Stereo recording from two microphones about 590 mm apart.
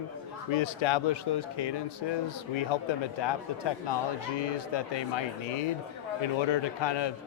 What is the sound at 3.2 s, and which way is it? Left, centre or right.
A man's voice, left.